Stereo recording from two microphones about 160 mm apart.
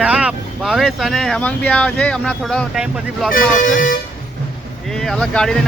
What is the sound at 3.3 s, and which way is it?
Speech, 55° left (ahead or behind).